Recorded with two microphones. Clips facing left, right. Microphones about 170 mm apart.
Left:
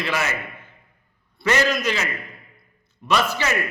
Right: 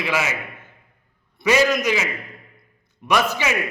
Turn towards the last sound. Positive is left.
turn(degrees=-15)  # may be behind; listen again after turning